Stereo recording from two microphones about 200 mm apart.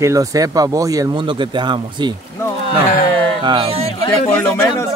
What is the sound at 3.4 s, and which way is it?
Speech, 25° right (ahead or behind).